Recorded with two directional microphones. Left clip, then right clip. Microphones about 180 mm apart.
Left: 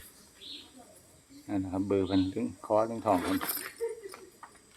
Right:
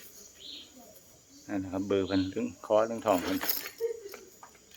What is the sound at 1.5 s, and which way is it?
Speech, 5° left (ahead or behind).